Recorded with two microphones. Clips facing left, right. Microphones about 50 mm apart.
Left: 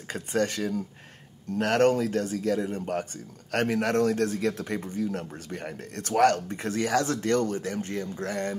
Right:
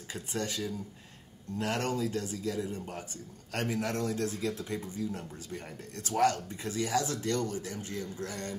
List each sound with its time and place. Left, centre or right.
0.1 s speech: left